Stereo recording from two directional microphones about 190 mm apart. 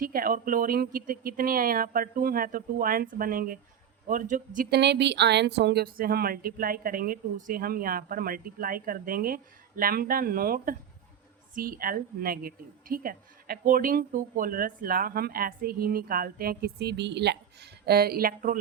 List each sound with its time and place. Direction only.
0.0 s a woman's voice: 50° right (ahead or behind)